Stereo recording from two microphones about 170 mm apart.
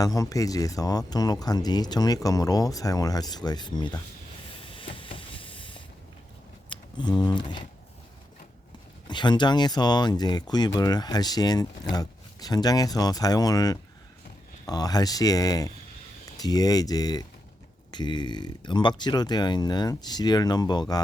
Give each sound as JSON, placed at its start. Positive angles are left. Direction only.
{"t": 0.0, "sound": "speech", "side_deg": 20}
{"t": 4.5, "sound": "spray", "side_deg": 30}
{"t": 6.7, "sound": "speech", "side_deg": 25}
{"t": 9.0, "sound": "speech", "side_deg": 25}